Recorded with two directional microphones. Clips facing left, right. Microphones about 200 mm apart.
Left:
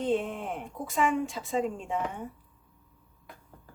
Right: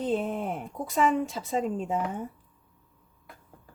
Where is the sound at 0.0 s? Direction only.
40° right (ahead or behind).